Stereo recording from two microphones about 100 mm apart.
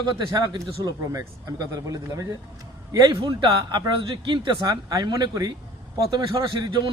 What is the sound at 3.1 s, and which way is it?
Speech, 50° right (ahead or behind).